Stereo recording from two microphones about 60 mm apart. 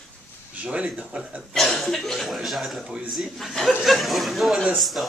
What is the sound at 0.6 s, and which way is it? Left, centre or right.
Speech, centre.